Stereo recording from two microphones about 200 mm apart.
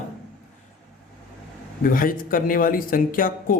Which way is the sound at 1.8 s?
45° left (ahead or behind).